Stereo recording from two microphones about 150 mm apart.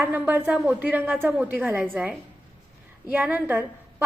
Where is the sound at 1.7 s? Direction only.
Centre (ahead or behind).